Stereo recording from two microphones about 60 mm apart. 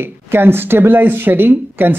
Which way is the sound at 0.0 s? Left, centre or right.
Right.